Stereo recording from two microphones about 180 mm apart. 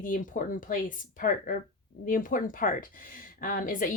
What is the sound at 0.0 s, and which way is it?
Speech, 50° left (ahead or behind).